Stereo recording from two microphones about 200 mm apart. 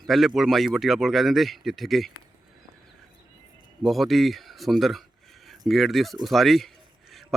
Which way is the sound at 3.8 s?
Centre (ahead or behind).